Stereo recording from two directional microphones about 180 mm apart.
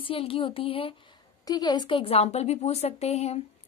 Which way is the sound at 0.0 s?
30° left (ahead or behind).